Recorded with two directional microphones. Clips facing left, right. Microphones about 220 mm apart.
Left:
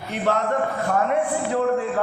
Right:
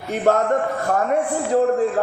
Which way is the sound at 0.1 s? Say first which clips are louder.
Right 5 dB; 45° right (ahead or behind).